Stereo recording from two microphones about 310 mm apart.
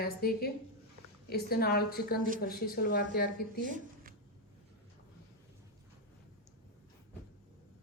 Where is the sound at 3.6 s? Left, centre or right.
Right.